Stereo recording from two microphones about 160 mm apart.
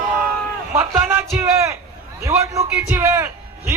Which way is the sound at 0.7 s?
15° right (ahead or behind).